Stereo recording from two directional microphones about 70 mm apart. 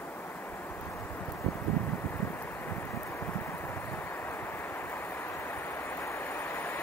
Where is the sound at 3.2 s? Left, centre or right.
Left.